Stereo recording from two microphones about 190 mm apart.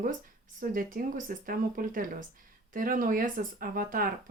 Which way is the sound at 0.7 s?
45° right (ahead or behind).